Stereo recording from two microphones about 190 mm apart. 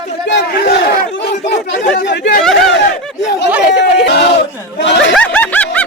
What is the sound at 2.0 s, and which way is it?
Chatter, 60° left (ahead or behind).